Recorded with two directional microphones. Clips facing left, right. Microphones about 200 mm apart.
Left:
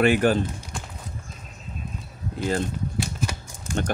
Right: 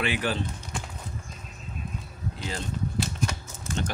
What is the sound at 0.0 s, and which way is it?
Speech, 50° left (ahead or behind).